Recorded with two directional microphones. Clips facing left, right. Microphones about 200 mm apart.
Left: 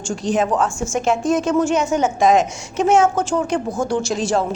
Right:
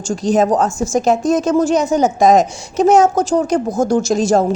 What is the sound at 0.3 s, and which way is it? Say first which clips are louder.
A woman's voice: right 5 dB; 40° right (ahead or behind).